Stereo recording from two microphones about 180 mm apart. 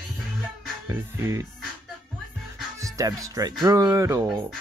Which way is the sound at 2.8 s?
20° right (ahead or behind).